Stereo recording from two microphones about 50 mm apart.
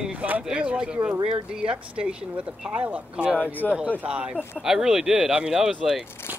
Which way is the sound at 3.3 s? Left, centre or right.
Left.